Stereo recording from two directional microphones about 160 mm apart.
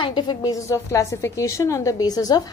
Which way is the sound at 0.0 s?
30° left (ahead or behind).